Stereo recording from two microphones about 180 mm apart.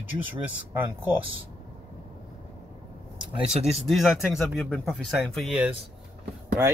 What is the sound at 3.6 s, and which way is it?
Speech, 35° right (ahead or behind).